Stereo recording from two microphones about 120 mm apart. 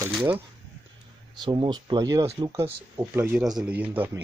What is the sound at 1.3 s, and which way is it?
Speech, 40° right (ahead or behind).